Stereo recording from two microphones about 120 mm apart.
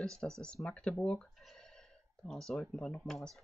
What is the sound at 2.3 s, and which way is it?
Speech, 5° left (ahead or behind).